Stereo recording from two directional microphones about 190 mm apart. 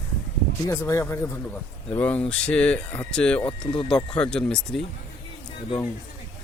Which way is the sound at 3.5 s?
25° left (ahead or behind).